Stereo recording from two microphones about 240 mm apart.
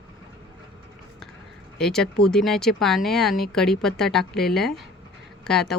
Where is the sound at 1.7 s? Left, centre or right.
Centre.